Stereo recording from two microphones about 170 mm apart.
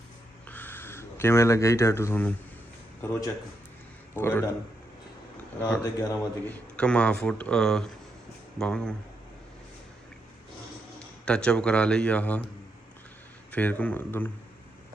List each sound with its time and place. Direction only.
0.4 s a sound: 10° left (ahead or behind)
3.0 s speech: 15° left (ahead or behind)
5.8 s speech: 20° left (ahead or behind)
6.5 s speech: 5° left (ahead or behind)
11.0 s a man's voice: 5° left (ahead or behind)
13.5 s speech: 10° left (ahead or behind)